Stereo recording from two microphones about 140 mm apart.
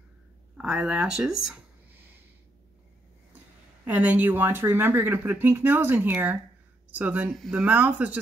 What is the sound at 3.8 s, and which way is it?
Speech, 10° right (ahead or behind).